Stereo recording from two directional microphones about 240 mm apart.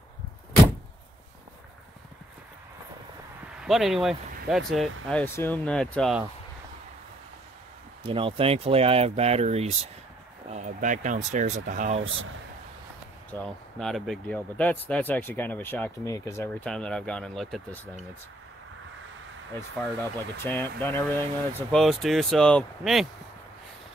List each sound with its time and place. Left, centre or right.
3.6 s speech: centre
8.0 s speech: right
13.3 s speech: centre
19.8 s speech: centre